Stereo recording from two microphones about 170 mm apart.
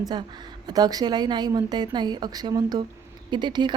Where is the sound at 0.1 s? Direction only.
25° right (ahead or behind).